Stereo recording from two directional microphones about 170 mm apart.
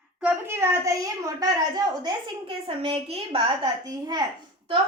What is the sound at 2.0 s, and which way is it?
A woman's voice, 30° right (ahead or behind).